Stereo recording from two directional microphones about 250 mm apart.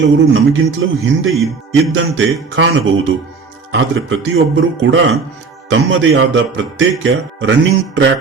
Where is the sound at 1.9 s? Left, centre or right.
Right.